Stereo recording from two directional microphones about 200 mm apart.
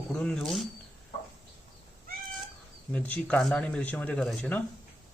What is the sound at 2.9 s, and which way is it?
Speech, 5° left (ahead or behind).